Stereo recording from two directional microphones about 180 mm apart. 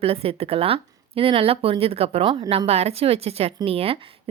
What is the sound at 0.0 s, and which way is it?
A woman's voice, 30° right (ahead or behind).